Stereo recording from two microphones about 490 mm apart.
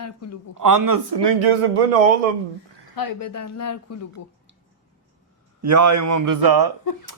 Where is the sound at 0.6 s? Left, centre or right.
Right.